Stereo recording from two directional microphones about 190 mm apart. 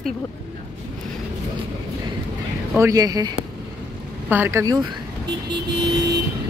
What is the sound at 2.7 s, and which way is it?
Speech, 15° right (ahead or behind).